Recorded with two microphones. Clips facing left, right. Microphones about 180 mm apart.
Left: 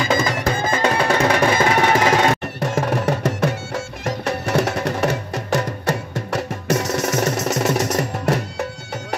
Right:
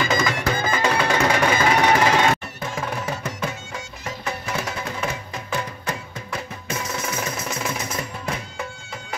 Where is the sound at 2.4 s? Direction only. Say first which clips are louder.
Left 8 dB; 70° left (ahead or behind).